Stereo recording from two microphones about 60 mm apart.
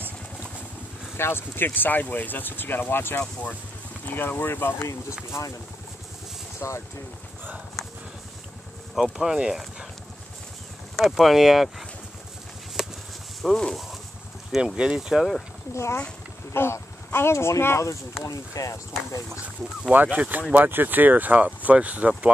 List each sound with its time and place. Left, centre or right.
1.1 s speech: left
6.6 s speech: left
8.9 s speech: centre
11.0 s speech: centre
13.4 s speech: centre
14.8 s speech: centre
15.7 s speech: left
16.5 s speech: left
18.2 s speech: left
19.9 s speech: right